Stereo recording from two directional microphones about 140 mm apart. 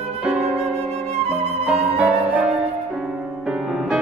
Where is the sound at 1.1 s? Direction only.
50° right (ahead or behind).